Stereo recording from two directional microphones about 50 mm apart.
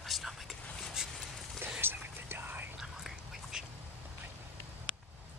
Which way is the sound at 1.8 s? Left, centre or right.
Right.